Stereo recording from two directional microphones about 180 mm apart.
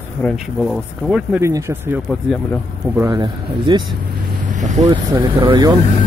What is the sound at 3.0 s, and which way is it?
Speech, 25° right (ahead or behind).